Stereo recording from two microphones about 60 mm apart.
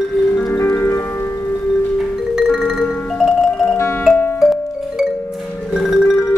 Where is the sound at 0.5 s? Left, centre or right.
Left.